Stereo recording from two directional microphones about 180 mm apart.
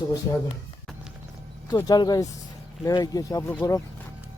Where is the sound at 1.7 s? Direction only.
20° left (ahead or behind).